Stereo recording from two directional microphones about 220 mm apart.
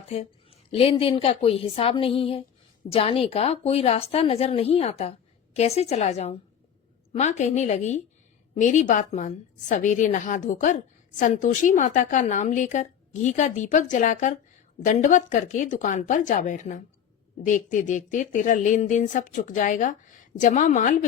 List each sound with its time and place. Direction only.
0.7 s a woman's voice: 25° left (ahead or behind)